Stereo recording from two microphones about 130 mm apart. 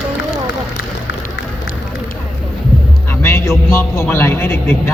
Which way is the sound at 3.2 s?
20° left (ahead or behind).